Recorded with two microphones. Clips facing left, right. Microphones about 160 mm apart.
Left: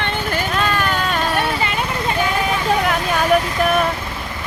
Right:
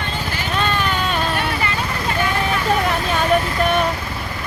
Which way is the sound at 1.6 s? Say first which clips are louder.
Left 2 dB; 20° left (ahead or behind).